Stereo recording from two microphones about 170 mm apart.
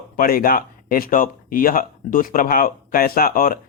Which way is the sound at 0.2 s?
60° left (ahead or behind).